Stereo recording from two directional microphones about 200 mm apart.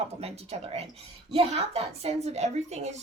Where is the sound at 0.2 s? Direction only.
30° right (ahead or behind).